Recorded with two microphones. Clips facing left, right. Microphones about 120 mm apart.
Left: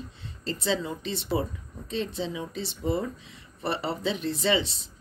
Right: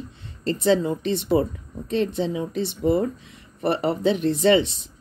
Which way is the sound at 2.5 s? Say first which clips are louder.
Right 8 dB; 55° right (ahead or behind).